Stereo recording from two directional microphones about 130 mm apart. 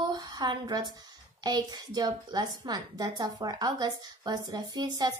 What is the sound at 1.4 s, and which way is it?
A woman's voice, 30° right (ahead or behind).